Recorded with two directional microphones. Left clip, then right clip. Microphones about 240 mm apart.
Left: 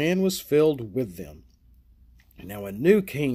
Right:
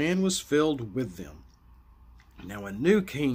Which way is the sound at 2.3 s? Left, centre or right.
Left.